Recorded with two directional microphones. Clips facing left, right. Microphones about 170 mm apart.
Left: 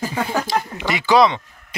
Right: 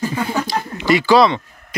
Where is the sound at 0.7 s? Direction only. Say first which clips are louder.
Right 4 dB; 20° left (ahead or behind).